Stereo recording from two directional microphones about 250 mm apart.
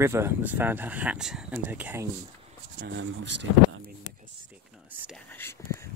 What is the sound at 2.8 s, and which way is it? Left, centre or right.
Speech, right.